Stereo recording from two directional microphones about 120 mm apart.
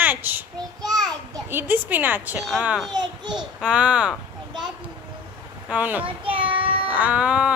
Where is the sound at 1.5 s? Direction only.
15° right (ahead or behind).